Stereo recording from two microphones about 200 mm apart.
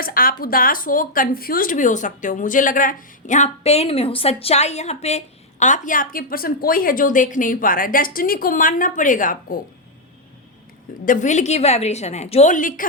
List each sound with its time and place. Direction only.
0.0 s a woman's voice: 45° left (ahead or behind)
11.0 s a woman's voice: 40° left (ahead or behind)